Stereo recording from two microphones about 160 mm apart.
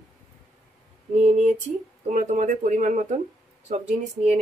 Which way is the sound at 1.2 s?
50° right (ahead or behind).